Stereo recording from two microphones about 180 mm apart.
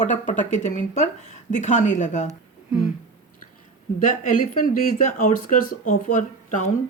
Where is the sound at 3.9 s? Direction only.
45° left (ahead or behind).